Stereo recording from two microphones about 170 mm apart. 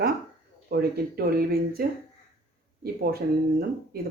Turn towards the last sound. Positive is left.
turn(degrees=-65)  # may be behind; listen again after turning